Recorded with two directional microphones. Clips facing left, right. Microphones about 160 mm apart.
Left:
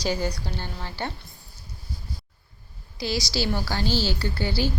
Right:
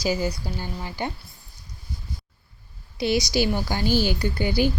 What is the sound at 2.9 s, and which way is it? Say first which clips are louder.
A woman's voice: right 6 dB; 20° right (ahead or behind).